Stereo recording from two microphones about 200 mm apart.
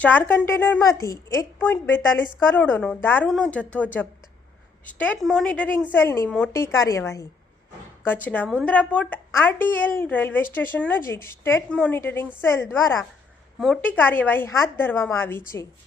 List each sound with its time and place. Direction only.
0.0 s a woman's voice: 10° left (ahead or behind)